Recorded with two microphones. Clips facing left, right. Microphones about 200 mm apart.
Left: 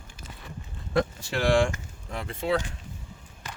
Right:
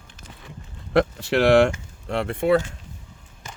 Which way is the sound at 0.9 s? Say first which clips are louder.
Right 7 dB; 70° right (ahead or behind).